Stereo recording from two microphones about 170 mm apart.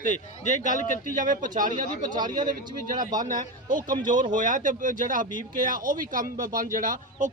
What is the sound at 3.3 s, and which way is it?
Speech, 50° right (ahead or behind).